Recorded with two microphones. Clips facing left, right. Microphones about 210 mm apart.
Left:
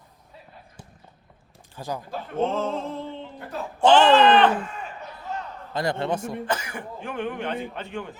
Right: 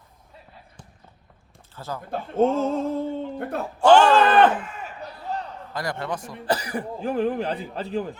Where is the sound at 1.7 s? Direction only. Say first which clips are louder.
Left 2 dB; 15° left (ahead or behind).